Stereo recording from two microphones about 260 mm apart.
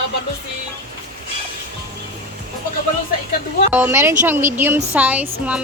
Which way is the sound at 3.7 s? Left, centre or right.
Centre.